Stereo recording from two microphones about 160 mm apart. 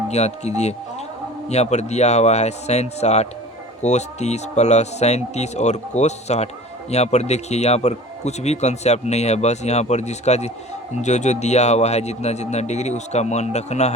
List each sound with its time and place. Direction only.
0.1 s speech: 45° left (ahead or behind)